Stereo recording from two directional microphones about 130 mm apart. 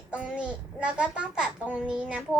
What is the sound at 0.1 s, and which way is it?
A woman's voice, 10° right (ahead or behind).